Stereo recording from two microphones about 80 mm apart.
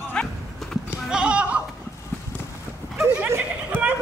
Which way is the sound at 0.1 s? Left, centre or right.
Centre.